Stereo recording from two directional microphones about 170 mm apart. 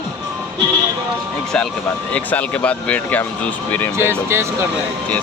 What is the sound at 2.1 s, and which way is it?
Speech, 10° left (ahead or behind).